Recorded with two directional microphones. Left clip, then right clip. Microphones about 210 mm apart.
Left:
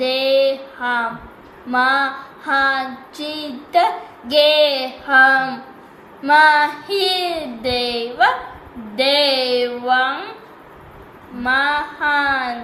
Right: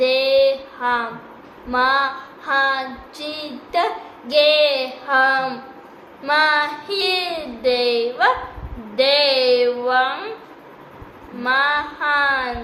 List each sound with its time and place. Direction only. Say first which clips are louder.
0.0 s female singing: right 1 dB; 15° right (ahead or behind)
11.4 s female singing: left 1 dB; 15° right (ahead or behind)